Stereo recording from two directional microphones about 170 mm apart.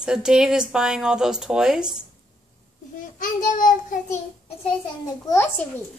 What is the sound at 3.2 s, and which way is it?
Speech, 50° left (ahead or behind).